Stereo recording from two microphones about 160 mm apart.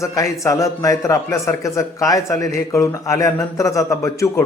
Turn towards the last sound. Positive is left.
turn(degrees=20)  # may be behind; listen again after turning